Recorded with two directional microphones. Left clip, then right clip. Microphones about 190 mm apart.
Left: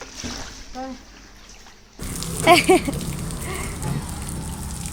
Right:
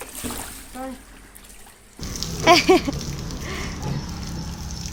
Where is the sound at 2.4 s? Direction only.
5° right (ahead or behind).